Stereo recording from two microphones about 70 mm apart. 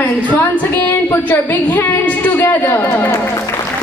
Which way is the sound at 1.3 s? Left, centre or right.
Left.